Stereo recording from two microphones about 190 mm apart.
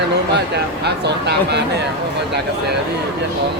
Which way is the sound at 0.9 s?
60° right (ahead or behind).